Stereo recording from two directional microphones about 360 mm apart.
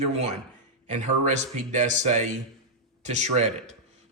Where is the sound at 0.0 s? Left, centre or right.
Centre.